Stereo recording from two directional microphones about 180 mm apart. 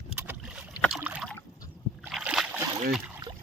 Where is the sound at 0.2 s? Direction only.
5° right (ahead or behind).